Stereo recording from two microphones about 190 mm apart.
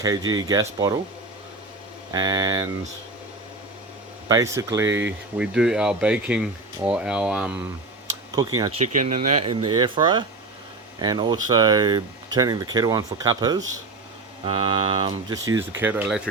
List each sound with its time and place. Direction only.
0.0 s speech: 20° right (ahead or behind)
2.1 s speech: 20° right (ahead or behind)
4.3 s speech: 20° right (ahead or behind)
8.8 s speech: 40° right (ahead or behind)
9.4 s speech: 20° right (ahead or behind)
15.8 s speech: 10° right (ahead or behind)